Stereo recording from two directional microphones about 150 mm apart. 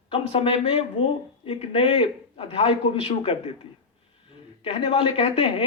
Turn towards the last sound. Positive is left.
turn(degrees=35)  # may be behind; listen again after turning